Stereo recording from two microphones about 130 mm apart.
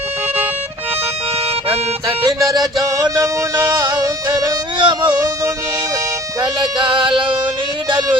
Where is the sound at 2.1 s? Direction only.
25° right (ahead or behind).